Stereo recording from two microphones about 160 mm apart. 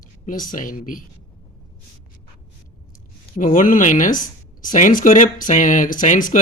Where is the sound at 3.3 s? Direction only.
55° left (ahead or behind).